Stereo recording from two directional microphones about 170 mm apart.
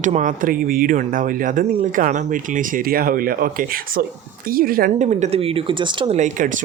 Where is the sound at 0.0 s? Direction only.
45° right (ahead or behind).